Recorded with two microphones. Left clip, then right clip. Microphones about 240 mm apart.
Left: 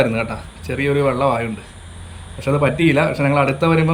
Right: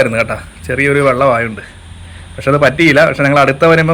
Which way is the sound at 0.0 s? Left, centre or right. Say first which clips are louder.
Right 6 dB; centre.